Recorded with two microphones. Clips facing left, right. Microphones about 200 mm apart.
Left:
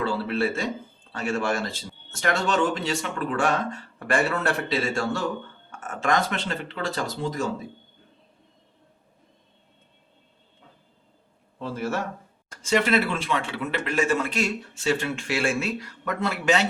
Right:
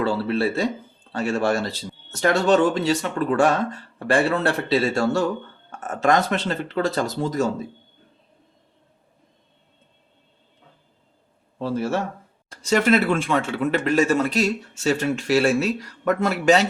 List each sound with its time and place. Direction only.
0.0 s speech: 35° right (ahead or behind)
11.6 s speech: 30° right (ahead or behind)
12.5 s speech: 40° right (ahead or behind)